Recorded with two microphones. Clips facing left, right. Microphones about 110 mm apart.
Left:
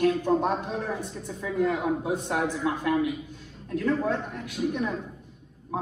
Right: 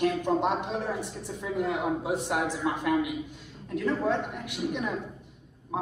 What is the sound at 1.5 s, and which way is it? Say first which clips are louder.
A man's voice: left 3 dB; 15° right (ahead or behind).